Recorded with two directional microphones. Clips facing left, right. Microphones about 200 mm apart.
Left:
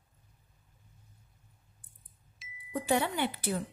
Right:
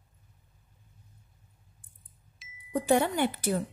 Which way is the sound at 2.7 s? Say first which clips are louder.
Right 5 dB; 45° right (ahead or behind).